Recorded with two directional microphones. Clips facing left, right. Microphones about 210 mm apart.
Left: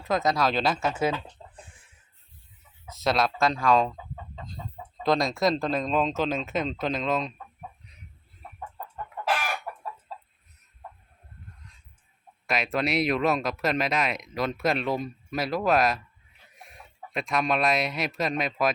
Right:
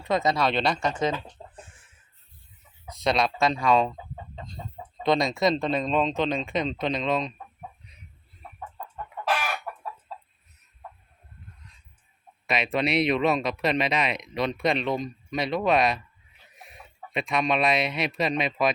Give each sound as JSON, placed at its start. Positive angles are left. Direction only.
{"t": 0.0, "sound": "speech", "side_deg": 0}
{"t": 1.4, "sound": "chicken", "side_deg": -25}
{"t": 2.9, "sound": "speech", "side_deg": 5}
{"t": 5.0, "sound": "speech", "side_deg": 0}
{"t": 7.9, "sound": "chicken", "side_deg": 0}
{"t": 12.5, "sound": "speech", "side_deg": 0}